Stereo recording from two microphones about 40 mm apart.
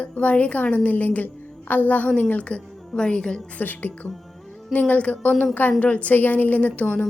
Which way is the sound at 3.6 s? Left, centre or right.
Left.